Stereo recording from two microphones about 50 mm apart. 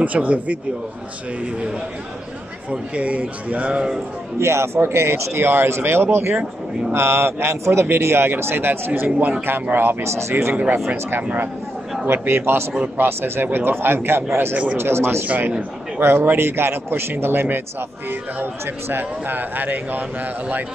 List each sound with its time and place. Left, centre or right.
0.0 s a man's voice: right
4.4 s speech: right
10.0 s speech: right
12.1 s speech: right
12.8 s speech: right
15.2 s speech: right
16.0 s speech: right